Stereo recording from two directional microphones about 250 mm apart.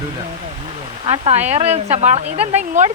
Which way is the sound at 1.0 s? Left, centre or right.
Right.